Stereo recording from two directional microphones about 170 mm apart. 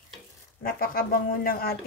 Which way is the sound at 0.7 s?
60° left (ahead or behind).